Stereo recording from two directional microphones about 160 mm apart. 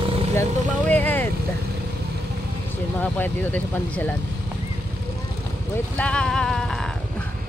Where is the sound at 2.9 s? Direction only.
10° left (ahead or behind).